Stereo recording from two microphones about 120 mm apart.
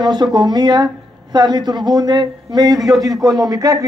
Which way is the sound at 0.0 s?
35° right (ahead or behind).